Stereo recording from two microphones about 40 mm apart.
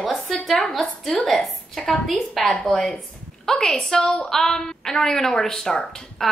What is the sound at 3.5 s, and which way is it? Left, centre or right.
Speech, centre.